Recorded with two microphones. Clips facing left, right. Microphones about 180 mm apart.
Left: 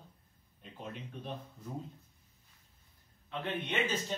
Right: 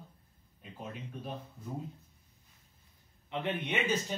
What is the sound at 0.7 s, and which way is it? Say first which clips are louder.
Speech: right 1 dB; 5° right (ahead or behind).